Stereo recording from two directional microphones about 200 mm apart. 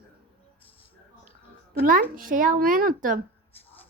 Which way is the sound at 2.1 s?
45° right (ahead or behind).